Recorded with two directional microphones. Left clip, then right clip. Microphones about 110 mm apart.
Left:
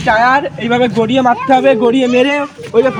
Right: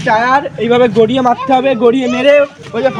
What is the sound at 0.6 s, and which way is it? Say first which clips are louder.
A man's voice: right 4 dB; 30° right (ahead or behind).